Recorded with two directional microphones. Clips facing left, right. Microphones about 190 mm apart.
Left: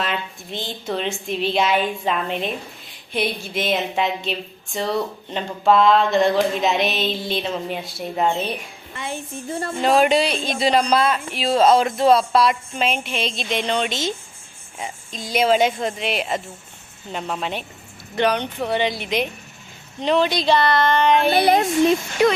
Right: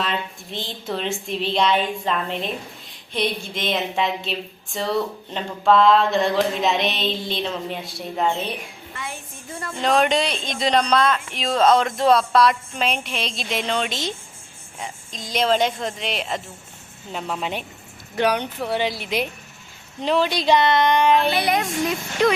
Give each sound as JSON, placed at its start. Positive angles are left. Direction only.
{"t": 0.0, "sound": "a woman's voice", "side_deg": 0}
{"t": 9.0, "sound": "a woman's voice", "side_deg": 30}
{"t": 9.8, "sound": "a woman's voice", "side_deg": 5}
{"t": 21.1, "sound": "a woman's voice", "side_deg": 0}
{"t": 21.3, "sound": "speech", "side_deg": 30}
{"t": 22.2, "sound": "speech", "side_deg": 10}